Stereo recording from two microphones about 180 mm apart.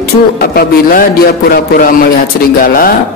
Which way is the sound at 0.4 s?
55° left (ahead or behind).